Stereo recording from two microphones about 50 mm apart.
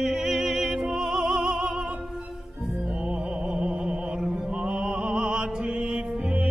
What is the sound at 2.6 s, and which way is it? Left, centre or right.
Music, centre.